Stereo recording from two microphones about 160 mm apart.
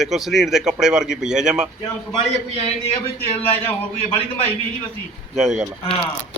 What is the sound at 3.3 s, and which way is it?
Speech, 40° left (ahead or behind).